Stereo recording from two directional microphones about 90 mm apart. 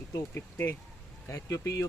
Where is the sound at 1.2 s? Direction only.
35° left (ahead or behind).